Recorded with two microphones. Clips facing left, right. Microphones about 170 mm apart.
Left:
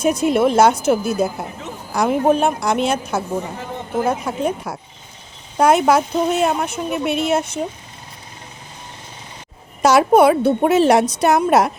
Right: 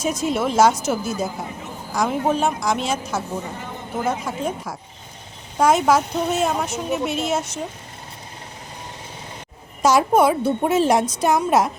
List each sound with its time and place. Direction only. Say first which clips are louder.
0.0 s a woman's voice: left 6 dB; 60° left (ahead or behind)
4.3 s a woman's voice: left 4 dB; 65° left (ahead or behind)
9.8 s a woman's voice: left 4 dB; 70° left (ahead or behind)